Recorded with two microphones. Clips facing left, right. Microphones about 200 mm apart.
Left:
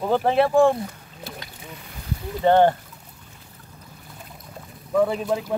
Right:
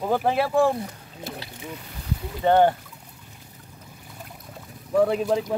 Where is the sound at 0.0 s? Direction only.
5° right (ahead or behind).